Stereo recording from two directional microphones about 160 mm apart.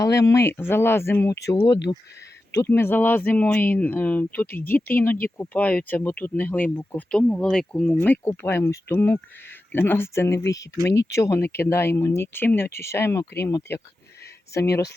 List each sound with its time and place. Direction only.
0.0 s speech: 20° left (ahead or behind)